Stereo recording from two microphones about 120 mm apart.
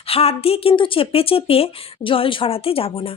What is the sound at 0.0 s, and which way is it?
Speech, 55° left (ahead or behind).